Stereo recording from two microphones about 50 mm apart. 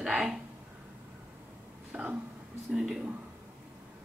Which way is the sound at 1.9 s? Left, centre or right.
Right.